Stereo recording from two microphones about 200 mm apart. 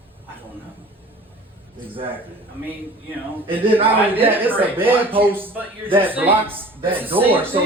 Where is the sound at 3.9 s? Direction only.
10° right (ahead or behind).